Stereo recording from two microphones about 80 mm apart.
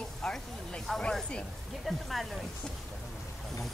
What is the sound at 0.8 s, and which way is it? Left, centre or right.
Speech, centre.